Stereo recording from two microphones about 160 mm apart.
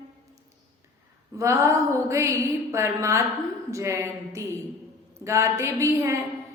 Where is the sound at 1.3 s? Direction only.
20° right (ahead or behind).